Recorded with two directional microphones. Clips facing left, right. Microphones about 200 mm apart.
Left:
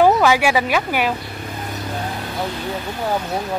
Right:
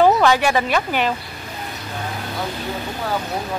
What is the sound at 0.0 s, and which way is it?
Speech, 10° left (ahead or behind).